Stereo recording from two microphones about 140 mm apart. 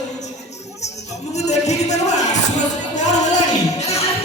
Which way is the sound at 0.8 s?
50° left (ahead or behind).